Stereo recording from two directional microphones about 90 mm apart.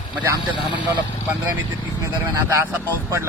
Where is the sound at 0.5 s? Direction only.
60° left (ahead or behind).